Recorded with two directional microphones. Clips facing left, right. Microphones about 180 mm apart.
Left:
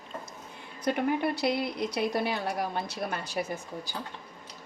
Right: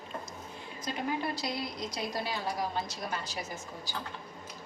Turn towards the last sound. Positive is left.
turn(degrees=60)  # may be behind; listen again after turning